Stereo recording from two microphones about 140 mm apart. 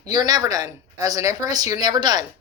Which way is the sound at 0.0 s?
30° right (ahead or behind).